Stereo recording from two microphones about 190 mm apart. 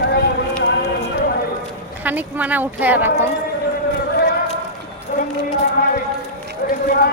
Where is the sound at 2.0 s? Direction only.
10° right (ahead or behind).